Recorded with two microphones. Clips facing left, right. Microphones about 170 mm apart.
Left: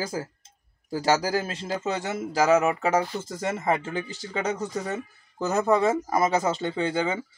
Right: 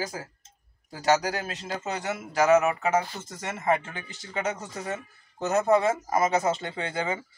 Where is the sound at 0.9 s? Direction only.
30° left (ahead or behind).